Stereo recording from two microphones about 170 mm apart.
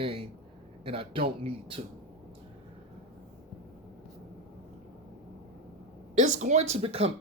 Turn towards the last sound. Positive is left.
turn(degrees=-35)  # may be behind; listen again after turning